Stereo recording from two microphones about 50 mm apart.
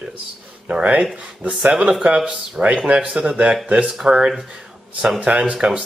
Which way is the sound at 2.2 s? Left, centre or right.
Centre.